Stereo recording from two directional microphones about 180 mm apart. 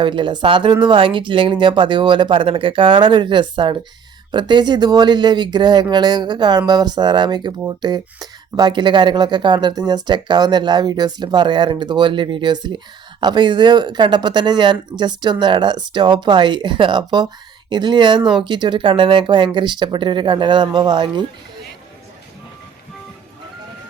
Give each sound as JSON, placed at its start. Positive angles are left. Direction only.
{"t": 0.0, "sound": "speech", "side_deg": -25}